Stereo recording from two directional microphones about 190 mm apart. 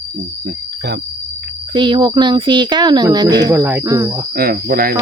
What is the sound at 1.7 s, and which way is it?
Speech, 25° right (ahead or behind).